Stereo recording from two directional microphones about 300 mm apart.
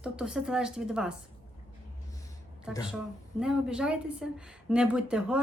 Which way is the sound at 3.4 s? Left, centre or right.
Centre.